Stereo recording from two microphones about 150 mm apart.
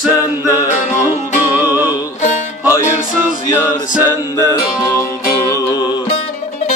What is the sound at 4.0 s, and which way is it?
Music, 25° left (ahead or behind).